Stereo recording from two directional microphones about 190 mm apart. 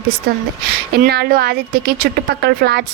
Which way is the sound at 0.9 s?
55° right (ahead or behind).